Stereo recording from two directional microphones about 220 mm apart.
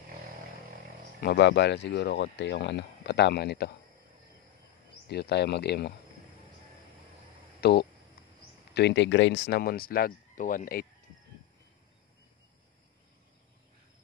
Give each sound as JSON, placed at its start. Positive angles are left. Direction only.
{"t": 1.2, "sound": "speech", "side_deg": 50}
{"t": 5.0, "sound": "speech", "side_deg": 50}
{"t": 7.6, "sound": "speech", "side_deg": 45}